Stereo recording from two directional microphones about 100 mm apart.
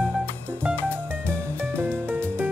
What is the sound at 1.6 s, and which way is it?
Music, 20° right (ahead or behind).